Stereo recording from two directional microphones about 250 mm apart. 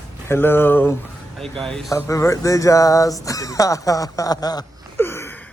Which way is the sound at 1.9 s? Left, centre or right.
Centre.